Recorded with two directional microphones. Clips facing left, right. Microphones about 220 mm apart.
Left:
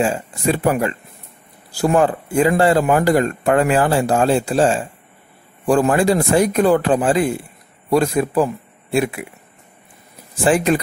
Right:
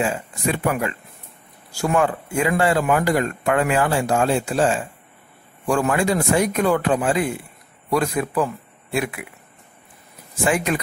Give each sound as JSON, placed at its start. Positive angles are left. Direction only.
{"t": 0.0, "sound": "speech", "side_deg": 30}
{"t": 10.4, "sound": "speech", "side_deg": 30}